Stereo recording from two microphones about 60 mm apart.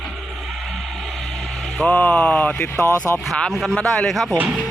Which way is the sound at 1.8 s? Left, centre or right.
Left.